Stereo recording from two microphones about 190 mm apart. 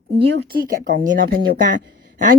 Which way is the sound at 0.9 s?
45° right (ahead or behind).